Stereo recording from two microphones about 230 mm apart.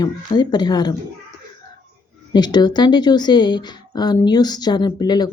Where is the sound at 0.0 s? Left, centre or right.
Centre.